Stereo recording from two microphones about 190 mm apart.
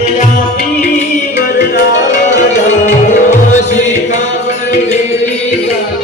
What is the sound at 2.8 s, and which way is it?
Music, 40° left (ahead or behind).